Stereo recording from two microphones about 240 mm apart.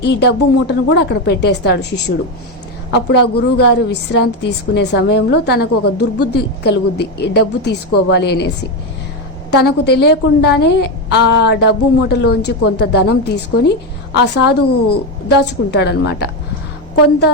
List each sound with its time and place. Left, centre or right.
0.0 s a woman's voice: left
9.5 s a woman's voice: left
15.7 s a woman's voice: left